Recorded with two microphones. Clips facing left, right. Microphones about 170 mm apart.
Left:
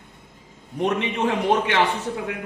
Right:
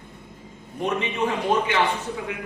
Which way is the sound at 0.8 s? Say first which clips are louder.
Left 2 dB; 70° left (ahead or behind).